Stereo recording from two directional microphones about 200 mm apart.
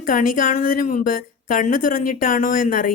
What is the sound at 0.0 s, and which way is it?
Speech, 45° left (ahead or behind).